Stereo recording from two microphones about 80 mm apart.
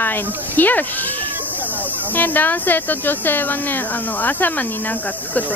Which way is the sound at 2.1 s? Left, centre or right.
Left.